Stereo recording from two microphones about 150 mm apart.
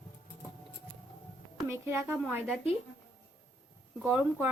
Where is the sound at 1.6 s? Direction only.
15° right (ahead or behind).